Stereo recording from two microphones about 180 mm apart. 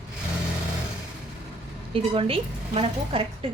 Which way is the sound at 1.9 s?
30° right (ahead or behind).